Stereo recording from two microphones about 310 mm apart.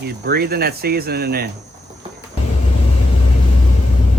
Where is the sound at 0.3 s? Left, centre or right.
Right.